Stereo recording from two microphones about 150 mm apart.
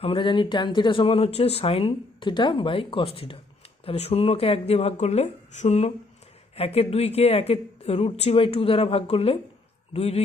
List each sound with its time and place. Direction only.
0.0 s speech: 35° left (ahead or behind)